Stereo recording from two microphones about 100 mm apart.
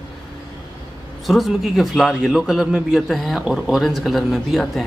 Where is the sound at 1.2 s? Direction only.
Centre (ahead or behind).